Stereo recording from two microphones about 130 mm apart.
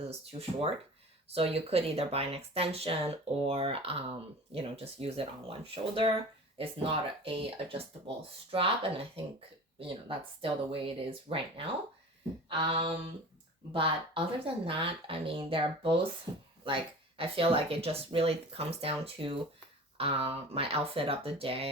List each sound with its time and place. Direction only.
0.1 s speech: 50° right (ahead or behind)
12.5 s a sound: 40° right (ahead or behind)
13.7 s speech: 40° right (ahead or behind)
16.3 s speech: 30° right (ahead or behind)
16.6 s speech: 45° right (ahead or behind)